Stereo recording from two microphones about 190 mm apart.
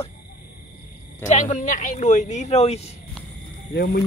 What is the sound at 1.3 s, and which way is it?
Speech, 40° left (ahead or behind).